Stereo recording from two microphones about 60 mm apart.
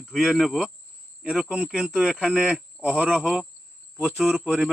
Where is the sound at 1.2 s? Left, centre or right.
Centre.